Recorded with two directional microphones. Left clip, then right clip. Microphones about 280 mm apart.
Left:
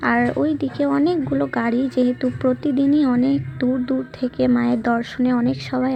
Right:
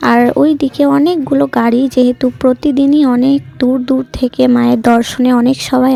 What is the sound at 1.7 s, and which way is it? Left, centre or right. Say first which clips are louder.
Speech: right 9 dB; right.